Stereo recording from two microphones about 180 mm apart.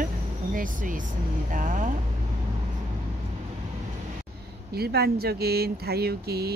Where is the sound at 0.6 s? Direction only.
50° right (ahead or behind).